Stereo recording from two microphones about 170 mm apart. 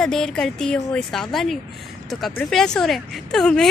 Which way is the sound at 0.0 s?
5° left (ahead or behind).